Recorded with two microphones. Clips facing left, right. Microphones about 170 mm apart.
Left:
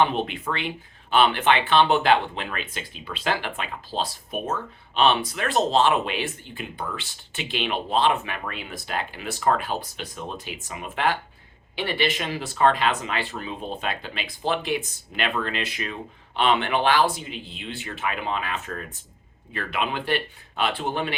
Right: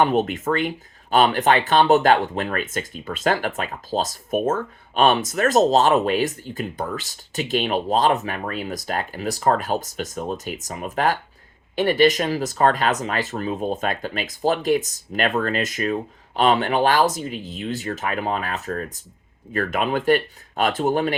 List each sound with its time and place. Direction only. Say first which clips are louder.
0.0 s speech: right 4 dB; 45° right (ahead or behind)